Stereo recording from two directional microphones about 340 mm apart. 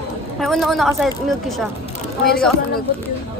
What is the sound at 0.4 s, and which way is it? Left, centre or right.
A woman's voice, centre.